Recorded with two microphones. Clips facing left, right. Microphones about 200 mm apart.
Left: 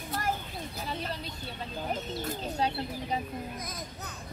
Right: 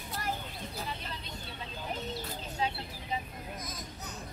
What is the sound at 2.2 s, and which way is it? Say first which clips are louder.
Bird: left 4 dB; 40° left (ahead or behind).